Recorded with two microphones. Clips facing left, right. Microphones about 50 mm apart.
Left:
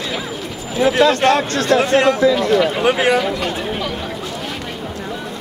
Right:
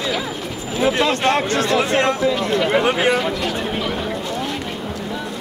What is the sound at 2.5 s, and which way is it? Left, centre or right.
Speech, centre.